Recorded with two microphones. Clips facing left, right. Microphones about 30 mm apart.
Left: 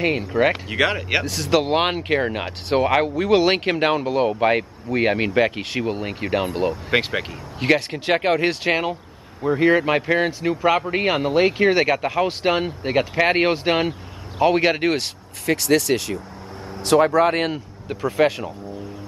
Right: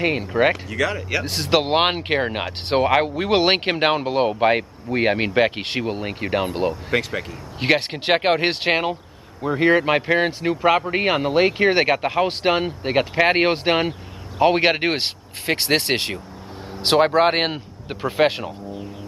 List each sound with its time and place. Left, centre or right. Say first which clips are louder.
0.2 s speech: even; centre
0.7 s speech: left 3 dB; left
1.2 s speech: even; right
3.3 s speech: left 2 dB; right; by 6.7 s centre
6.9 s speech: left 2 dB; left
7.6 s speech: even; right
9.6 s speech: right 1 dB; centre
14.4 s speech: right 1 dB; right